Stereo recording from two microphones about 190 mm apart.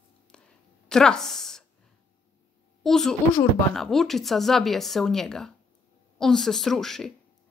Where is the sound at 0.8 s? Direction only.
5° left (ahead or behind).